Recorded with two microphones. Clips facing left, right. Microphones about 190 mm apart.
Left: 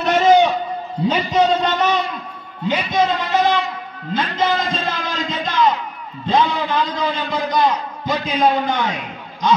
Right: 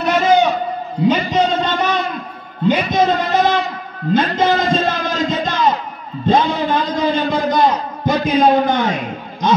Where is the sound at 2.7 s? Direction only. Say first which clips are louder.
Right 3 dB; 45° right (ahead or behind).